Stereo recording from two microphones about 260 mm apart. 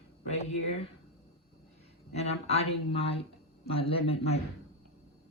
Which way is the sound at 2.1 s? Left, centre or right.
Left.